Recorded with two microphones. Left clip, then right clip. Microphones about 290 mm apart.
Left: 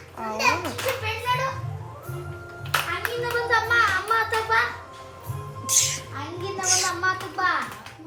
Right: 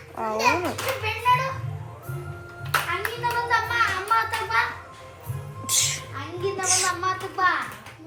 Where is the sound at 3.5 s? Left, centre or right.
Left.